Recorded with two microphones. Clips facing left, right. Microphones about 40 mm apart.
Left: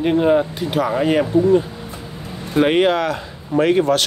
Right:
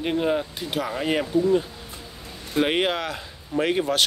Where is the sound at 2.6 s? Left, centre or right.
Centre.